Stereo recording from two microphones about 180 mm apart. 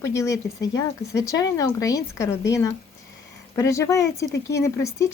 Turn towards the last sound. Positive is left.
turn(degrees=15)  # may be behind; listen again after turning